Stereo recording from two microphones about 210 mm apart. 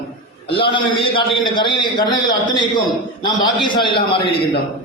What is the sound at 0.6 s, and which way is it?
A man's voice, 25° left (ahead or behind).